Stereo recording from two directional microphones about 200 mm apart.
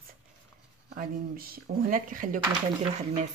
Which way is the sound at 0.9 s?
45° right (ahead or behind).